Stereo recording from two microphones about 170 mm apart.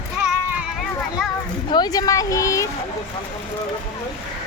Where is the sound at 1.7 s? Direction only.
25° left (ahead or behind).